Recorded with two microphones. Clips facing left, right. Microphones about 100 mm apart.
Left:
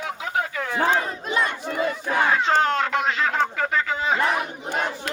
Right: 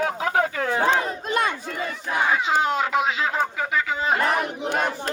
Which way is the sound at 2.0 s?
5° right (ahead or behind).